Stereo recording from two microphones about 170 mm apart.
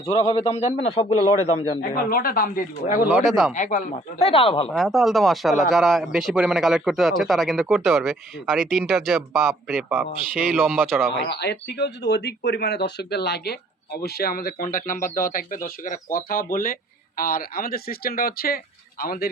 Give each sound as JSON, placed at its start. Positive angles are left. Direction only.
{"t": 0.0, "sound": "a man's voice", "side_deg": 20}
{"t": 0.5, "sound": "a man's voice", "side_deg": 40}
{"t": 1.8, "sound": "speech", "side_deg": 55}
{"t": 3.2, "sound": "a man's voice", "side_deg": 0}
{"t": 3.5, "sound": "a man's voice", "side_deg": 45}
{"t": 4.7, "sound": "a man's voice", "side_deg": 0}
{"t": 9.9, "sound": "a man's voice", "side_deg": -10}
{"t": 11.3, "sound": "speech", "side_deg": 75}